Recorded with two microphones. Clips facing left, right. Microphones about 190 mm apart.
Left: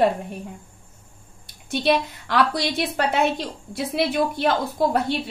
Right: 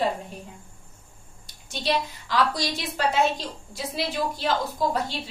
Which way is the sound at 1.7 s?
60° left (ahead or behind).